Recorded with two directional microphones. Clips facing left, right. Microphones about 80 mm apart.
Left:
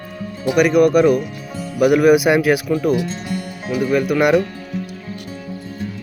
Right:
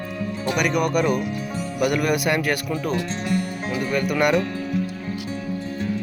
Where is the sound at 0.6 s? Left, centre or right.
Centre.